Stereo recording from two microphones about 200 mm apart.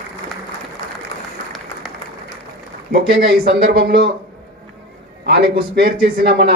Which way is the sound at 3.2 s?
50° right (ahead or behind).